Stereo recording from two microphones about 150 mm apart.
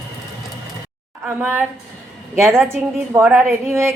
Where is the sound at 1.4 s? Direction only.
10° right (ahead or behind).